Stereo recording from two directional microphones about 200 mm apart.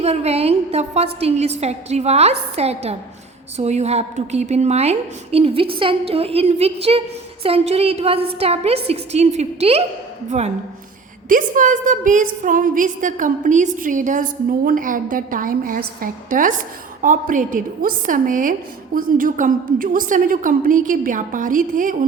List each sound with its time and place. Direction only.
0.0 s a woman's voice: 30° right (ahead or behind)